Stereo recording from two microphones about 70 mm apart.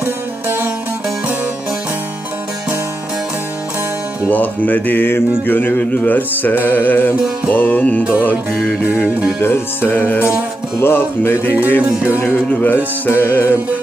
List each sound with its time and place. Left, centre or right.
0.0 s music: right
4.3 s music: left
9.4 s speech: left
11.8 s music: centre
12.6 s music: left